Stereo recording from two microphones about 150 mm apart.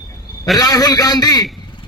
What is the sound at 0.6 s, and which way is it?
Speech, 25° left (ahead or behind).